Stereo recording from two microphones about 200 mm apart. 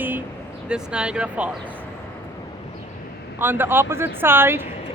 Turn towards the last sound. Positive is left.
turn(degrees=-10)  # may be behind; listen again after turning